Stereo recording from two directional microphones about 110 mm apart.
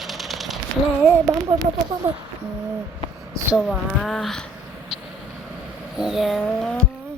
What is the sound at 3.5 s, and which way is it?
Speech, 5° left (ahead or behind).